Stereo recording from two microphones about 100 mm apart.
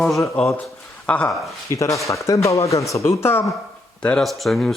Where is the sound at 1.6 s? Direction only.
30° left (ahead or behind).